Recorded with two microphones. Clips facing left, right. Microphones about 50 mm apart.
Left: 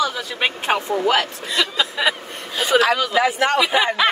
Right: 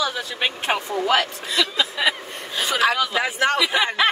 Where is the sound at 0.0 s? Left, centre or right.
Left.